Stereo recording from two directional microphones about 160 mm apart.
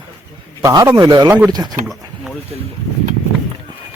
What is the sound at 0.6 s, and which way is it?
A man's voice, 20° right (ahead or behind).